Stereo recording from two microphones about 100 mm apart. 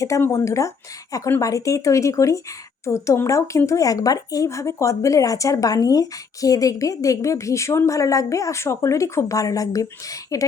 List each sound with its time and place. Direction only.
0.2 s speech: 30° left (ahead or behind)